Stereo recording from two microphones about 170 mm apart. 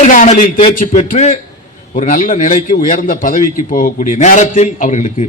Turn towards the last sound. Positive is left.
turn(degrees=45)  # may be behind; listen again after turning